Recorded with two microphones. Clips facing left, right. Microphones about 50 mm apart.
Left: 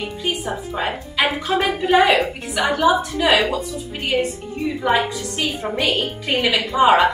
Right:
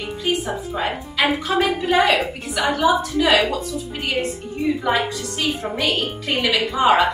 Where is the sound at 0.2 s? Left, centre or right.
Centre.